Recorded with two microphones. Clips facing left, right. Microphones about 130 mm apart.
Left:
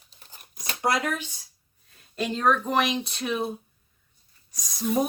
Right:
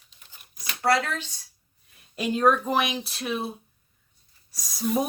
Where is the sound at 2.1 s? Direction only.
10° right (ahead or behind).